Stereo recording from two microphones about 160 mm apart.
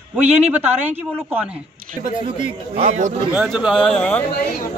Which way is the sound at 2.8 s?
50° right (ahead or behind).